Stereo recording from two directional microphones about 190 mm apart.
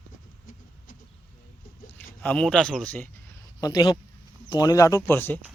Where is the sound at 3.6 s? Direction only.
25° left (ahead or behind).